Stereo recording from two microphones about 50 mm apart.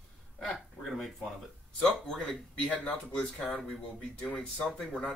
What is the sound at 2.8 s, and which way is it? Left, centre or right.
Speech, left.